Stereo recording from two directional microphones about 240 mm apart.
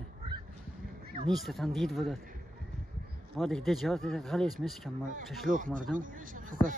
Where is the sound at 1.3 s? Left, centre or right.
Centre.